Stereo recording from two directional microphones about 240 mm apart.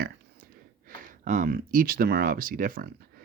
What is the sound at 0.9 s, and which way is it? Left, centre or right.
Speech, right.